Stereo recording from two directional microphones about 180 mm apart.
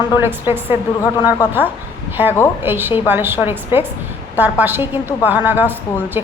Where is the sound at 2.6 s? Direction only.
10° right (ahead or behind).